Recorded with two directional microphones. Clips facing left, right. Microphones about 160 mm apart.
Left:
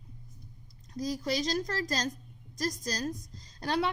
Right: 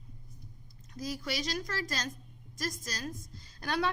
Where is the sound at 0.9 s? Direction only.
35° left (ahead or behind).